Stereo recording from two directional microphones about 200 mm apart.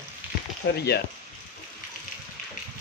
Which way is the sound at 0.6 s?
55° left (ahead or behind).